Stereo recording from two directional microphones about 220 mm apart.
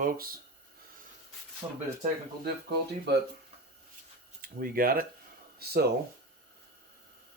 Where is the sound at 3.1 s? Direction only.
50° right (ahead or behind).